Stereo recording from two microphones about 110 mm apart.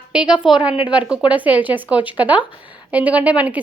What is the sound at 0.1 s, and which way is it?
A woman's voice, 10° right (ahead or behind).